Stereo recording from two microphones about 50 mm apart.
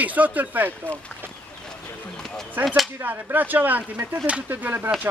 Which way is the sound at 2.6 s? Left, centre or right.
Centre.